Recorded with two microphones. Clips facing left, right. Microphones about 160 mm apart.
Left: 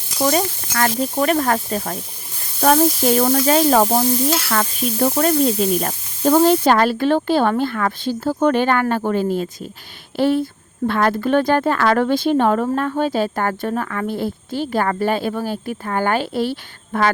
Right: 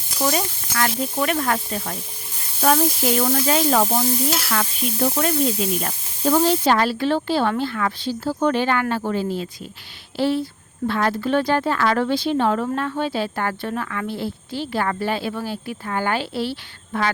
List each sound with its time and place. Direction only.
0.2 s speech: 45° left (ahead or behind)
5.0 s speech: 40° left (ahead or behind)